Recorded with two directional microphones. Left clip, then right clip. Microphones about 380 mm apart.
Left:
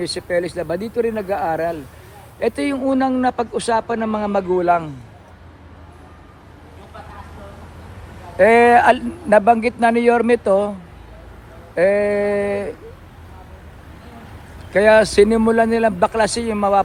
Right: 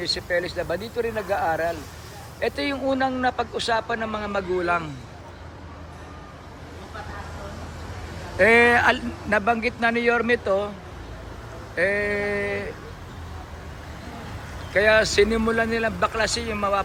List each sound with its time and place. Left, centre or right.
0.0 s speech: centre
8.4 s speech: centre
11.7 s speech: centre
14.7 s speech: centre